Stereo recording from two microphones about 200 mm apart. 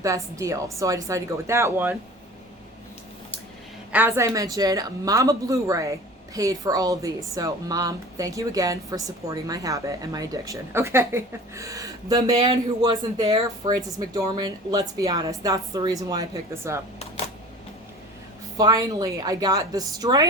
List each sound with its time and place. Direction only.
0.0 s speech: 15° right (ahead or behind)
3.9 s speech: 10° right (ahead or behind)
18.5 s a woman's voice: 20° right (ahead or behind)